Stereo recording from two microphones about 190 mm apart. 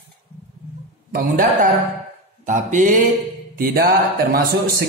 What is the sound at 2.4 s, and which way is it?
Mantra, 40° right (ahead or behind).